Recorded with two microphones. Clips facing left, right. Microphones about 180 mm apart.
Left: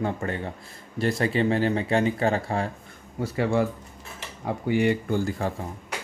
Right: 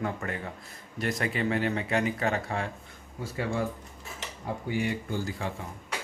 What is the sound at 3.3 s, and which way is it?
Speech, 75° left (ahead or behind).